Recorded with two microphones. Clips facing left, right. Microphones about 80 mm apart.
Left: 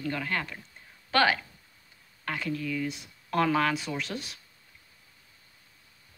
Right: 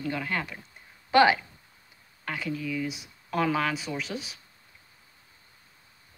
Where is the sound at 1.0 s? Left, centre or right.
Centre.